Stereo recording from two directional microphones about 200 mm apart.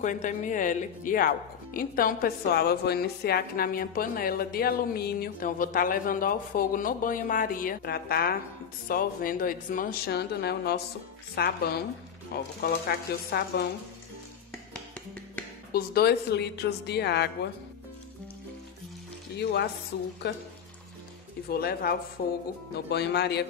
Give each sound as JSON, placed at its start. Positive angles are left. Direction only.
{"t": 0.0, "sound": "speech", "side_deg": 40}
{"t": 15.7, "sound": "speech", "side_deg": 50}
{"t": 19.3, "sound": "speech", "side_deg": 55}
{"t": 21.5, "sound": "speech", "side_deg": 50}
{"t": 22.8, "sound": "speech", "side_deg": 55}